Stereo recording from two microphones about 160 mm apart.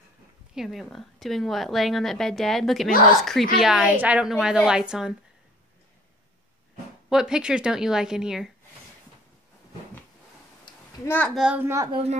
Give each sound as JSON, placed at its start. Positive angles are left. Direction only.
{"t": 0.6, "sound": "a woman's voice", "side_deg": 0}
{"t": 7.1, "sound": "a woman's voice", "side_deg": -5}
{"t": 11.1, "sound": "a child's voice", "side_deg": 10}
{"t": 11.3, "sound": "a child's voice", "side_deg": -5}
{"t": 11.9, "sound": "speech", "side_deg": -40}